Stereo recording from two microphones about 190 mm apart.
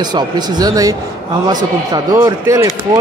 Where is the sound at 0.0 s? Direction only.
20° right (ahead or behind).